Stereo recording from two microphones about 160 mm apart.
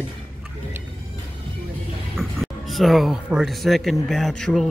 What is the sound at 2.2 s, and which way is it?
Speech, centre (ahead or behind).